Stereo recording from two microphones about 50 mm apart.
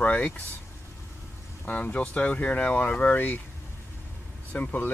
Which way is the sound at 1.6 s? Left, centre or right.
Left.